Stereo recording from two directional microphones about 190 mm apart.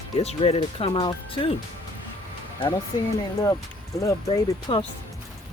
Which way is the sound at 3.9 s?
20° left (ahead or behind).